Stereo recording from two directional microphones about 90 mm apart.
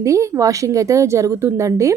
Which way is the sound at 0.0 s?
35° right (ahead or behind).